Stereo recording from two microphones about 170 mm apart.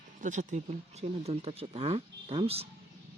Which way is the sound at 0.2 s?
45° right (ahead or behind).